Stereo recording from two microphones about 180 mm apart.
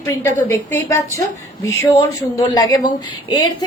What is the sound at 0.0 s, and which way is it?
A woman's voice, 15° left (ahead or behind).